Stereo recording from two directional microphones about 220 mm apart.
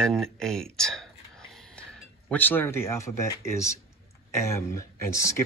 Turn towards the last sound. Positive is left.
turn(degrees=15)  # may be behind; listen again after turning